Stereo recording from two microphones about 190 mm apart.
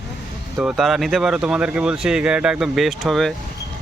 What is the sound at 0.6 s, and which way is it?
Speech, centre (ahead or behind).